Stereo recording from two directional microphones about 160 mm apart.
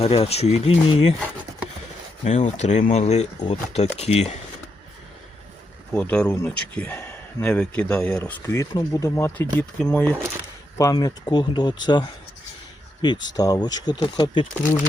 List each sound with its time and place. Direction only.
0.0 s speech: 40° left (ahead or behind)
2.2 s speech: 45° left (ahead or behind)
5.9 s speech: 5° left (ahead or behind)
10.8 s speech: 20° left (ahead or behind)
14.4 s speech: 55° left (ahead or behind)